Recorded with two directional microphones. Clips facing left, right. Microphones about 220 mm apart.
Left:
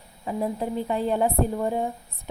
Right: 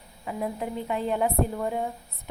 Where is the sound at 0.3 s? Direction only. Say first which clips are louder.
Left 4 dB; 35° left (ahead or behind).